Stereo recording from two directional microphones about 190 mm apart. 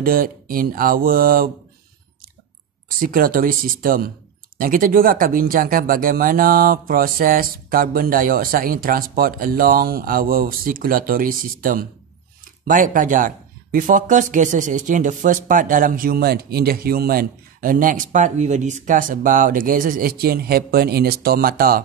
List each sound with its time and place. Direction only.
0.0 s speech: 50° right (ahead or behind)
3.0 s speech: 50° right (ahead or behind)